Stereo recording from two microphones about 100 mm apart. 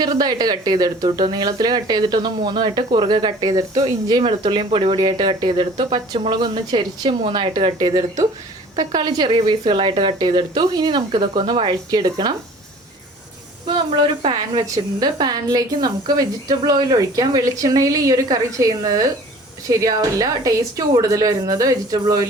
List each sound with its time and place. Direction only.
0.0 s speech: 45° right (ahead or behind)
4.2 s speech: 60° right (ahead or behind); by 12.3 s 40° right (ahead or behind)
13.7 s speech: 60° right (ahead or behind)
14.5 s a woman's voice: 40° right (ahead or behind)